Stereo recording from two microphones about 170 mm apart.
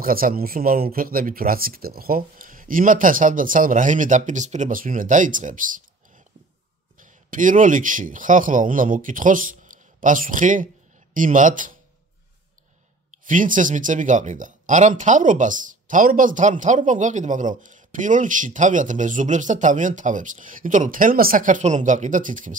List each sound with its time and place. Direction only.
0.0 s speech: 55° right (ahead or behind)
13.2 s speech: 50° right (ahead or behind)